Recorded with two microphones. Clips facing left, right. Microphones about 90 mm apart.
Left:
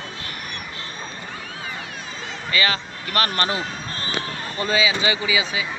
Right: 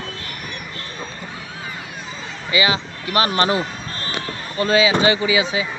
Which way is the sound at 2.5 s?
15° right (ahead or behind).